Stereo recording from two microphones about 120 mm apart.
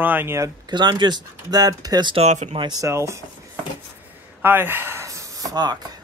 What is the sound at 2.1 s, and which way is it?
Speech, 65° right (ahead or behind).